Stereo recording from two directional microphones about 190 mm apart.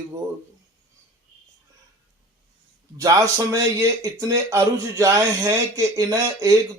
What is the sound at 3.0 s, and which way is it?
Speech, 15° right (ahead or behind).